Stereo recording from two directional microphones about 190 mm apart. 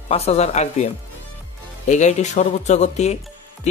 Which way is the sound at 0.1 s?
30° left (ahead or behind).